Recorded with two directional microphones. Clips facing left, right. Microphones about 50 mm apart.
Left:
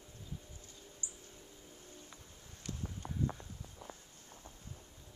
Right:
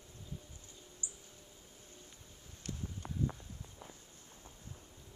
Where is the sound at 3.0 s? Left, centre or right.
Right.